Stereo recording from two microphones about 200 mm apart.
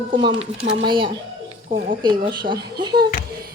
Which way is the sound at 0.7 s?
25° right (ahead or behind).